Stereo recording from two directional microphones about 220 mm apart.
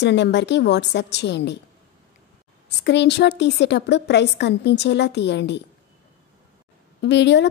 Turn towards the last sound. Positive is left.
turn(degrees=55)  # may be behind; listen again after turning